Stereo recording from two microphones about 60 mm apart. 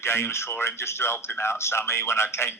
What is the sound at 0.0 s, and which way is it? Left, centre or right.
A man's voice, left.